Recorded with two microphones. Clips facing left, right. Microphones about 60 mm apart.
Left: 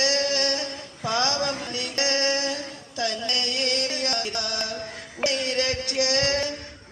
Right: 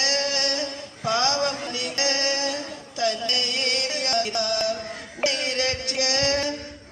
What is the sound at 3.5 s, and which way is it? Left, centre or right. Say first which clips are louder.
Music: even; right.